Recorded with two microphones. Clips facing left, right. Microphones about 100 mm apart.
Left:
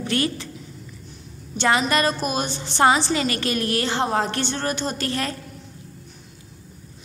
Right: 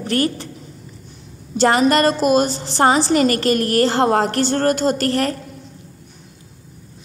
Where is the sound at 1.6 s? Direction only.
45° right (ahead or behind).